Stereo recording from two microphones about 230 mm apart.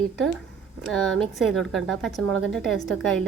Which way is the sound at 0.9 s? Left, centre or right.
Centre.